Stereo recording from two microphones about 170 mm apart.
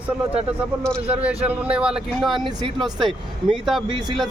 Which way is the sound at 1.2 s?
5° right (ahead or behind).